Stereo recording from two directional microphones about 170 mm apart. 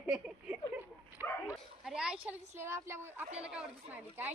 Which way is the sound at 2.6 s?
15° right (ahead or behind).